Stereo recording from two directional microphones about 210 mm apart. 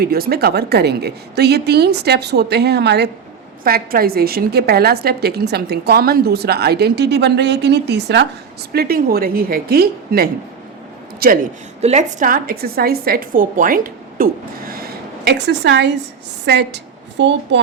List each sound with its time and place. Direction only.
0.0 s a woman's voice: 45° right (ahead or behind)
11.8 s a woman's voice: 30° right (ahead or behind)
14.7 s a sound: 45° right (ahead or behind)
16.5 s a woman's voice: 55° right (ahead or behind)